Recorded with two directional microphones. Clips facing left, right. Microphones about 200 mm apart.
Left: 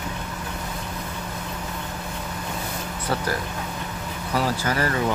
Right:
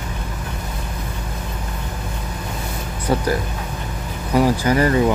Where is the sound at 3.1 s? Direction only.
15° right (ahead or behind).